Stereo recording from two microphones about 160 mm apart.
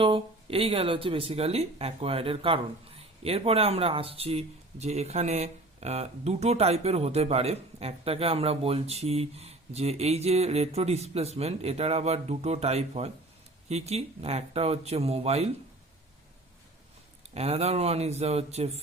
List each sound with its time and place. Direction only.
0.0 s speech: 35° right (ahead or behind)
17.3 s speech: 40° right (ahead or behind)